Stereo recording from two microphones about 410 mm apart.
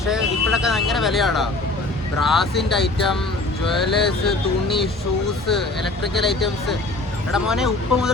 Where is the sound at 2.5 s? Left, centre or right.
Centre.